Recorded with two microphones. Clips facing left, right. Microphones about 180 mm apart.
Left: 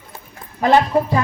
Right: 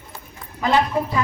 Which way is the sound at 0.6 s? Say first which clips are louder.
Left 5 dB; 45° left (ahead or behind).